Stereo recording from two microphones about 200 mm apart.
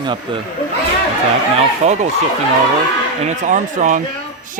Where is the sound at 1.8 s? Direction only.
35° right (ahead or behind).